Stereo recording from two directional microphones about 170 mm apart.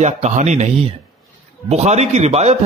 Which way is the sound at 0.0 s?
45° right (ahead or behind).